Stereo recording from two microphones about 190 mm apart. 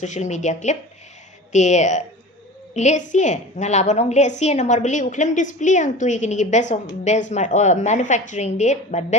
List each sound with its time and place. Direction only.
0.0 s a woman's voice: 40° left (ahead or behind)